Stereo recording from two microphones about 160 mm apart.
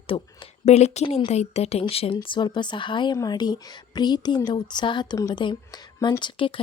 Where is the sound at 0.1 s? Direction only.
35° left (ahead or behind).